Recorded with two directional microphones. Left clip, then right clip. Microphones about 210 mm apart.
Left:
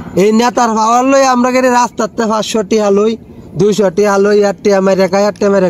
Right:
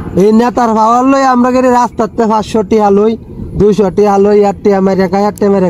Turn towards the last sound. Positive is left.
turn(degrees=45)  # may be behind; listen again after turning